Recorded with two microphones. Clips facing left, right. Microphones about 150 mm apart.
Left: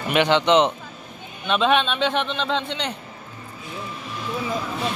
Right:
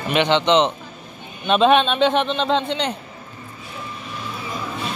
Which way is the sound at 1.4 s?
30° right (ahead or behind).